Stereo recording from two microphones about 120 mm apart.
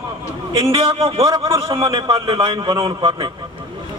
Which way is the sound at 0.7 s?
55° right (ahead or behind).